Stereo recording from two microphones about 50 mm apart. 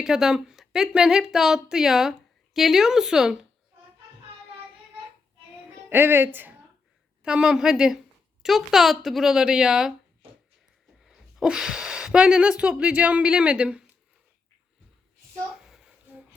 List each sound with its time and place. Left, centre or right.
0.0 s a woman's voice: centre
5.9 s speech: right
7.2 s a woman's voice: centre
11.0 s speech: centre
15.5 s child singing: centre